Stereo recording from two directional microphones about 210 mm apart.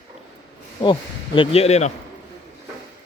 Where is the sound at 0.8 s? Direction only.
25° left (ahead or behind).